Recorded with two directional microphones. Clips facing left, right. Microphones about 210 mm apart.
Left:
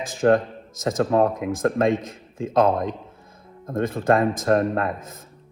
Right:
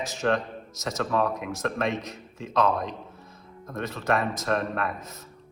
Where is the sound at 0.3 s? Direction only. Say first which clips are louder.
Left 6 dB; 50° left (ahead or behind).